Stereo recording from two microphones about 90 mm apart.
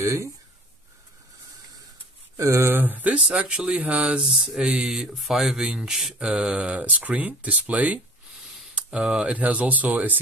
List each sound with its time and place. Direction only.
0.0 s speech: 30° right (ahead or behind)
2.3 s speech: 35° right (ahead or behind); by 10.1 s 20° right (ahead or behind)